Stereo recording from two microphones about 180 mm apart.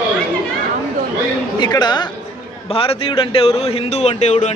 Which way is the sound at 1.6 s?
25° left (ahead or behind).